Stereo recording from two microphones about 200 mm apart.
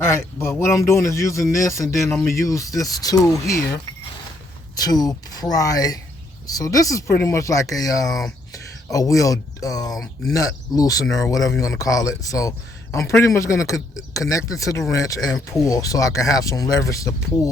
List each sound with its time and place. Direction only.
0.0 s a man's voice: 10° left (ahead or behind)
2.0 s speech: 5° left (ahead or behind)
2.4 s a man's voice: 15° left (ahead or behind)
8.0 s speech: centre (ahead or behind)
8.9 s a man's voice: 15° left (ahead or behind)